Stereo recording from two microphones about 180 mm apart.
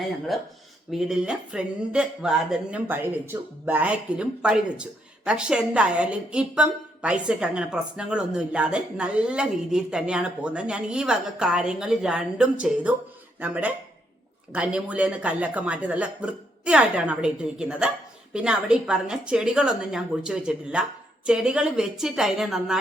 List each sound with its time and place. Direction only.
0.3 s speech: centre (ahead or behind)